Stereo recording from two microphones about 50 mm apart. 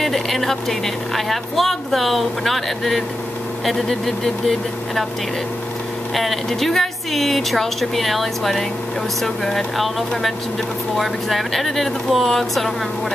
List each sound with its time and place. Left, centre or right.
0.0 s a woman's voice: centre
6.1 s a woman's voice: centre
11.0 s a woman's voice: centre